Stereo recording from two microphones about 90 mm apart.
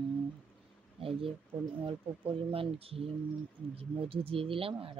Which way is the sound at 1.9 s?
90° right.